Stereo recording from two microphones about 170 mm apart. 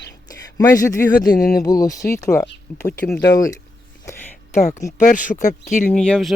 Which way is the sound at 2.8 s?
10° left (ahead or behind).